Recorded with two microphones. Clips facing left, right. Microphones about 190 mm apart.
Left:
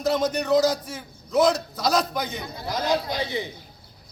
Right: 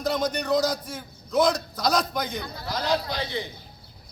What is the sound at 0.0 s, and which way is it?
A man's voice, 5° left (ahead or behind).